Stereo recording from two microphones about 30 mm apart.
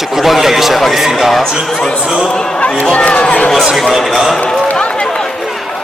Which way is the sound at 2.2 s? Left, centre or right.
Left.